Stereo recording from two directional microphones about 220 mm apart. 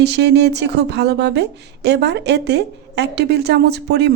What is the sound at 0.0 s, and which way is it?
Speech, 50° right (ahead or behind).